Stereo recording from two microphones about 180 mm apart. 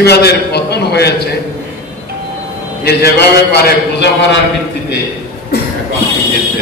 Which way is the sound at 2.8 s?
65° left (ahead or behind).